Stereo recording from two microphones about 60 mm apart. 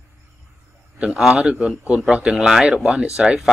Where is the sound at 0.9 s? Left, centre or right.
Centre.